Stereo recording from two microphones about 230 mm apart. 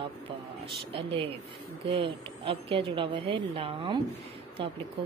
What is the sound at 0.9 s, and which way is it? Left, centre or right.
A woman's voice, right.